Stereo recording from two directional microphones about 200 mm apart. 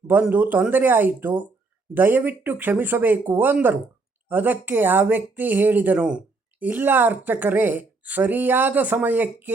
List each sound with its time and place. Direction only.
0.1 s speech: 10° right (ahead or behind)